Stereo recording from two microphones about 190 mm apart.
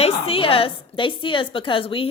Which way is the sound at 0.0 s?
30° left (ahead or behind).